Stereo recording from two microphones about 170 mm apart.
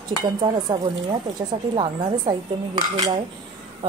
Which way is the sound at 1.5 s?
25° right (ahead or behind).